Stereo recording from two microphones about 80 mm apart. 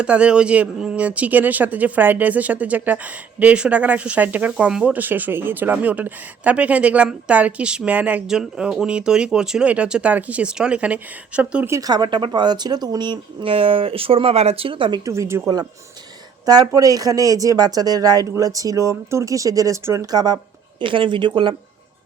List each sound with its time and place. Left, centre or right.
0.0 s speech: centre
11.8 s speech: right
14.7 s a woman's voice: right
15.0 s speech: right
16.5 s speech: right
20.8 s speech: right